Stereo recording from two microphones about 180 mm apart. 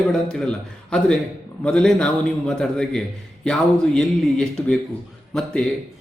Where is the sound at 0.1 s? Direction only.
5° left (ahead or behind).